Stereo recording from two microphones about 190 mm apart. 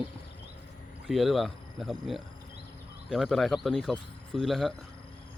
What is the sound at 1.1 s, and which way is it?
Speech, centre (ahead or behind).